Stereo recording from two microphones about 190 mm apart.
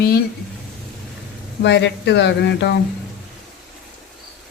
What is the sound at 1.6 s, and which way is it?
Speech, 70° left (ahead or behind).